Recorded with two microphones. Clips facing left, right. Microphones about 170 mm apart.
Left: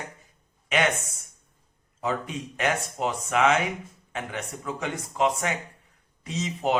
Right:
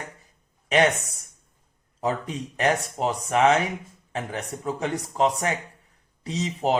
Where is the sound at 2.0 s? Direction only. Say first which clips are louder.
Right 2 dB; 35° right (ahead or behind).